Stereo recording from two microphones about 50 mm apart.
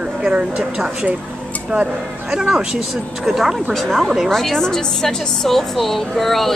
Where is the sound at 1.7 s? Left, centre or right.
Right.